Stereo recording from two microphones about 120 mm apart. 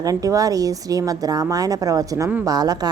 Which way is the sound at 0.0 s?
30° right (ahead or behind).